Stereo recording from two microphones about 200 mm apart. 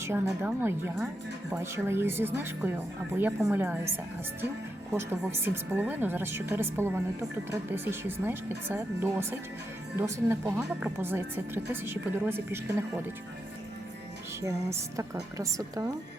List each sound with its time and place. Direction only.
0.0 s speech: 10° right (ahead or behind)
4.9 s speech: 10° right (ahead or behind)
14.4 s speech: 15° right (ahead or behind)